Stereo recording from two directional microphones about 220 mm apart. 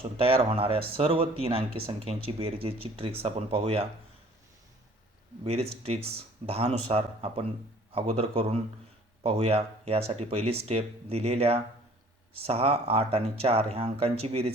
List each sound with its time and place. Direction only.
0.0 s speech: 25° right (ahead or behind)
5.4 s speech: 25° right (ahead or behind)